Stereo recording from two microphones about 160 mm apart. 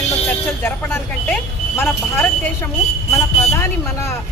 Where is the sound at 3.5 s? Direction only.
15° left (ahead or behind).